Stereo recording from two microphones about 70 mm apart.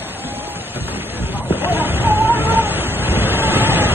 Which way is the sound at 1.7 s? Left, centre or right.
Right.